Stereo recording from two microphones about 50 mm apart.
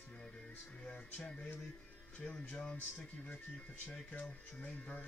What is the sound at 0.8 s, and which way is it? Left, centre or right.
Music, left.